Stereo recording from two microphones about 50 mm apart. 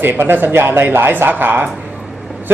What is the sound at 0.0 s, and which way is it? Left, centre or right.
A man's voice, right.